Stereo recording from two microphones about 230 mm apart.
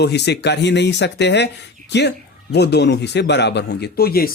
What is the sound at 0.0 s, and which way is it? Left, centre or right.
Speech, left.